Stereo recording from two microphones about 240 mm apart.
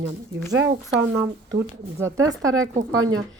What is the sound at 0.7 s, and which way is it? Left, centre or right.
Speech, right.